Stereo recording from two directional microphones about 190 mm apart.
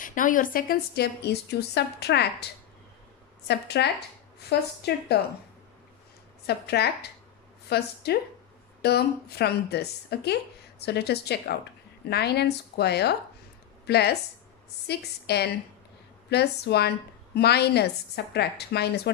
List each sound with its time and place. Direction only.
0.0 s a woman's voice: 45° left (ahead or behind); by 5.2 s 60° left (ahead or behind)
6.4 s a woman's voice: 60° left (ahead or behind)